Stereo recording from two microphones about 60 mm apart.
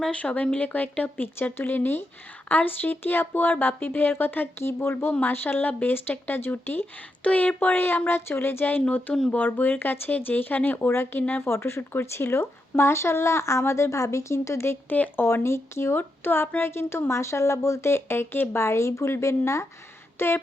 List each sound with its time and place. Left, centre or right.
0.1 s speech: left
7.3 s speech: left
11.4 s speech: left
14.8 s speech: left
15.2 s speech: left